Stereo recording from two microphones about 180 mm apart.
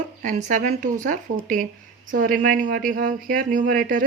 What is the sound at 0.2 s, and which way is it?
Speech, 45° right (ahead or behind).